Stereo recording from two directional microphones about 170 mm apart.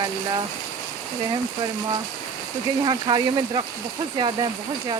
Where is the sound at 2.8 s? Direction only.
25° right (ahead or behind).